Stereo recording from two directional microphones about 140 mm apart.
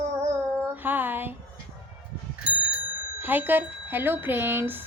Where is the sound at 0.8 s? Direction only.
15° right (ahead or behind).